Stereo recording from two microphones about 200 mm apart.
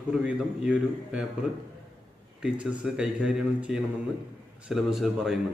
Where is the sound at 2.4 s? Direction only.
5° right (ahead or behind).